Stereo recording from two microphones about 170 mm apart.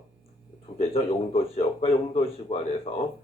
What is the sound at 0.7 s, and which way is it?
Speech, 35° left (ahead or behind).